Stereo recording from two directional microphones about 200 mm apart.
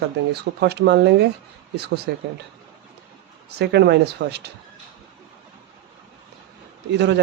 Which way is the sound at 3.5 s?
55° right (ahead or behind).